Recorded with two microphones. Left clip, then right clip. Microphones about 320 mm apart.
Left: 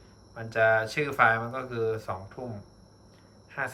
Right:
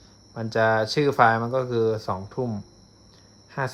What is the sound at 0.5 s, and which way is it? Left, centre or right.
Speech, centre.